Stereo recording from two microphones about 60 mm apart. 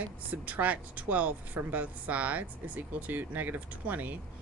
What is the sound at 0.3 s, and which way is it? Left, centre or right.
A woman's voice, right.